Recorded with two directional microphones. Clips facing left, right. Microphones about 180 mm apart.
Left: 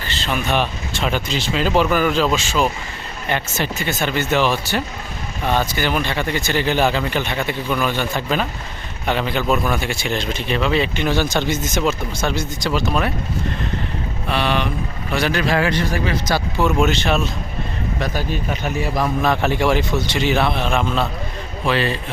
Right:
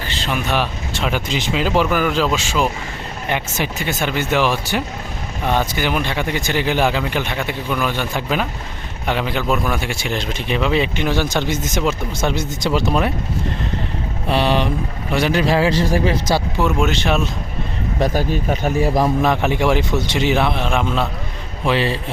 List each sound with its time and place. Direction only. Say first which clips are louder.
0.1 s speech: left 1 dB; 10° right (ahead or behind)
14.3 s speech: right 3 dB; 35° right (ahead or behind)
15.1 s speech: right 2 dB; 25° right (ahead or behind)
16.9 s speech: even; 10° right (ahead or behind)
18.0 s speech: right 6 dB; 45° right (ahead or behind)
19.2 s speech: right 1 dB; 15° right (ahead or behind)
21.6 s speech: right 1 dB; 20° right (ahead or behind)